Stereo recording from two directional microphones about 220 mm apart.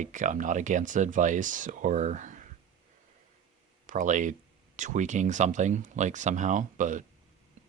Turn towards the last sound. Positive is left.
turn(degrees=-35)  # may be behind; listen again after turning